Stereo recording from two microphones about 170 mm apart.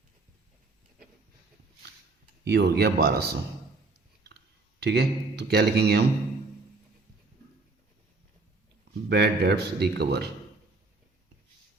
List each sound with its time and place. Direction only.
2.4 s speech: 70° right (ahead or behind)
9.0 s speech: 70° right (ahead or behind)